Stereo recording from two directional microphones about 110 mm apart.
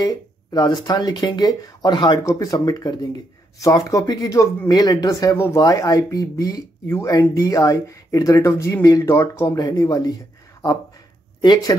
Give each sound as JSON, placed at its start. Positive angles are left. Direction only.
{"t": 0.0, "sound": "speech", "side_deg": 35}
{"t": 2.2, "sound": "speech", "side_deg": 30}
{"t": 5.3, "sound": "speech", "side_deg": 25}
{"t": 11.4, "sound": "speech", "side_deg": 40}